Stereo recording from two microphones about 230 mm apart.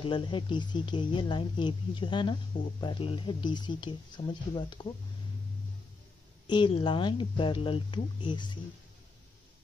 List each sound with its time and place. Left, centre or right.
0.0 s speech: left
6.4 s speech: centre